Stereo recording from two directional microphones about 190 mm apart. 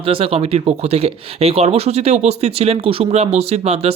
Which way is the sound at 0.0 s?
30° right (ahead or behind).